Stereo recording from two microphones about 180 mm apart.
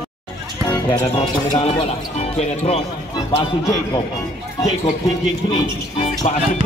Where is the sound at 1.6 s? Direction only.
35° left (ahead or behind).